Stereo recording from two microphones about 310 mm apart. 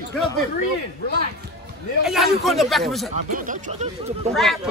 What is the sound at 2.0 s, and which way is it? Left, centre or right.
A man's voice, centre.